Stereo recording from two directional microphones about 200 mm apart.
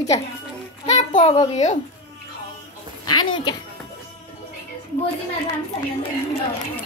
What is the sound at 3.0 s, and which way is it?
Speech, 20° left (ahead or behind).